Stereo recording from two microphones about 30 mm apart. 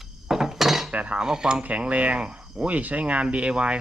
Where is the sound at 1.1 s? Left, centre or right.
Right.